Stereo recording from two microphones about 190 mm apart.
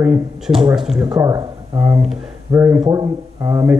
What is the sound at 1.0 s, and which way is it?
Speech, 20° right (ahead or behind).